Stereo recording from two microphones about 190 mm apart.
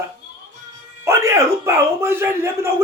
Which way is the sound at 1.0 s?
15° right (ahead or behind).